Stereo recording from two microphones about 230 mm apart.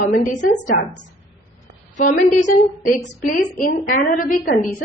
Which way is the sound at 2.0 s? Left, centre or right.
Left.